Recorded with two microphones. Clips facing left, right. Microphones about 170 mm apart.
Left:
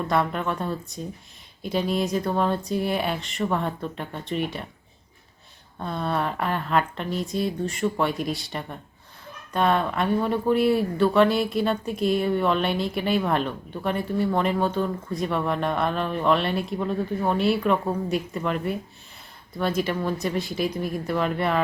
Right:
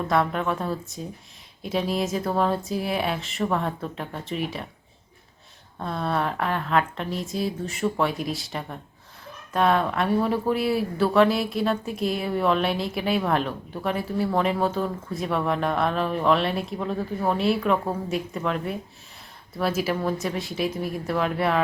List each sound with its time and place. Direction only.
0.1 s speech: centre (ahead or behind)
5.8 s speech: centre (ahead or behind)